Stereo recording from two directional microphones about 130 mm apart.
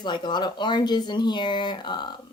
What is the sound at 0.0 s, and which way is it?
Speech, 35° left (ahead or behind).